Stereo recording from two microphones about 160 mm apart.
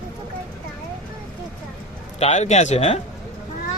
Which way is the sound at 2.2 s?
45° left (ahead or behind).